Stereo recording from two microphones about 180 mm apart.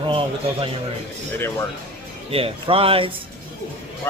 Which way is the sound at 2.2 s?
30° right (ahead or behind).